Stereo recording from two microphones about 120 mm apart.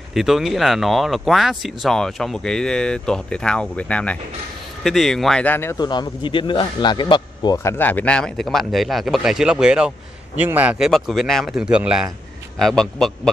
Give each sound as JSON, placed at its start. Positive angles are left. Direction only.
{"t": 0.1, "sound": "speech", "side_deg": 0}
{"t": 5.5, "sound": "speech", "side_deg": 20}
{"t": 5.8, "sound": "a man's voice", "side_deg": 40}
{"t": 7.5, "sound": "speech", "side_deg": 20}
{"t": 10.8, "sound": "speech", "side_deg": 0}